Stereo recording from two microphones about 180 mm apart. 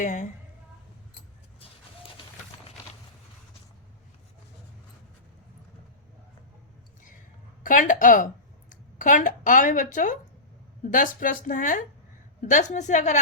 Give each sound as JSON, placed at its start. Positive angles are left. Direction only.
{"t": 0.0, "sound": "speech", "side_deg": 45}
{"t": 7.6, "sound": "a woman's voice", "side_deg": 45}